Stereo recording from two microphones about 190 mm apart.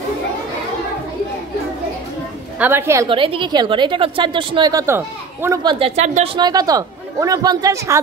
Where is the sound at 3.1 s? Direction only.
25° right (ahead or behind).